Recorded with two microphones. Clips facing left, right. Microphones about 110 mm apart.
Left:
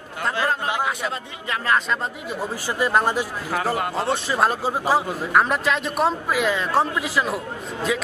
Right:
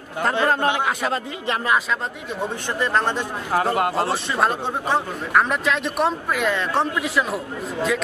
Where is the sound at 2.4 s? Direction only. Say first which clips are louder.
Even; 5° left (ahead or behind).